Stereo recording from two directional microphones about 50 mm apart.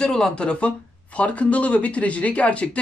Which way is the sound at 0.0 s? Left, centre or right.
Centre.